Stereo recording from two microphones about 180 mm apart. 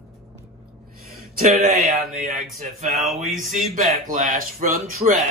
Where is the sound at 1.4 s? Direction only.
50° right (ahead or behind).